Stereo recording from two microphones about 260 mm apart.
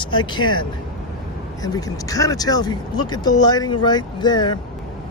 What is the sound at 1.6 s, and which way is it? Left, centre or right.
Speech, centre.